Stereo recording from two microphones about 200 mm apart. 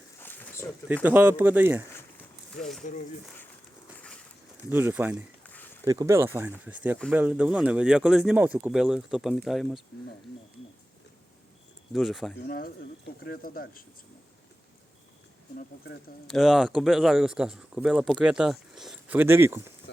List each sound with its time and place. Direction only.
0.2 s a sound: 10° left (ahead or behind)
1.0 s speech: 10° right (ahead or behind)
1.9 s a sound: 5° left (ahead or behind)
4.7 s speech: 10° right (ahead or behind)
5.5 s a sound: 10° left (ahead or behind)
5.8 s speech: 15° right (ahead or behind); by 9.8 s centre (ahead or behind)
11.9 s speech: centre (ahead or behind)
12.5 s speech: 50° left (ahead or behind)
16.2 s speech: centre (ahead or behind)